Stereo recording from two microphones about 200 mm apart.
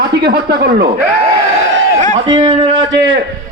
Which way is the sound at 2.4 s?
30° right (ahead or behind).